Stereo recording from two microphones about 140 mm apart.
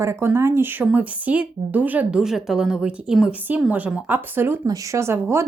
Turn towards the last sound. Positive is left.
turn(degrees=-20)  # may be behind; listen again after turning